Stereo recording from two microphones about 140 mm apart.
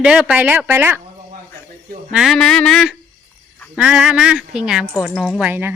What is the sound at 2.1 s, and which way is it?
Speech, centre (ahead or behind).